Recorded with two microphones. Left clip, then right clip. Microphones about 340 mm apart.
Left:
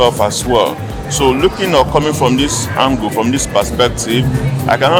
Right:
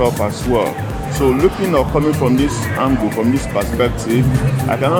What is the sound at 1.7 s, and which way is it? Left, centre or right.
Speech, left.